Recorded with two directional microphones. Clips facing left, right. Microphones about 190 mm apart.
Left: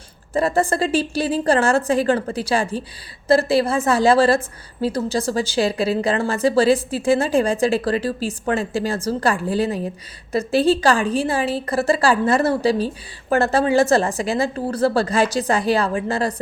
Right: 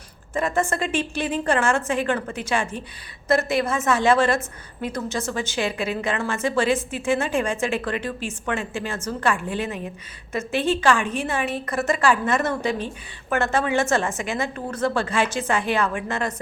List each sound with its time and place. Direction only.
0.3 s a woman's voice: 35° left (ahead or behind)